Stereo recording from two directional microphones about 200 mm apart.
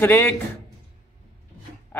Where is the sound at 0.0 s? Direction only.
10° left (ahead or behind).